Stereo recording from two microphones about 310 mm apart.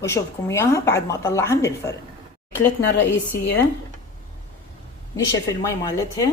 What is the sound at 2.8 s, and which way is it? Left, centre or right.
Speech, left.